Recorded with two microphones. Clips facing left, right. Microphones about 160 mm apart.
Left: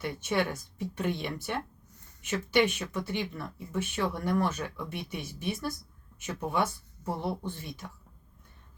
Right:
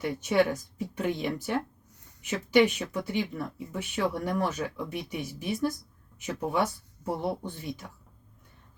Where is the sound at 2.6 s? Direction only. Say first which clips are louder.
Right 4 dB; 15° right (ahead or behind).